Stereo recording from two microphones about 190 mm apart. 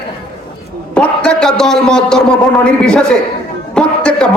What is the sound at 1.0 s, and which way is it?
A man's voice, 5° left (ahead or behind).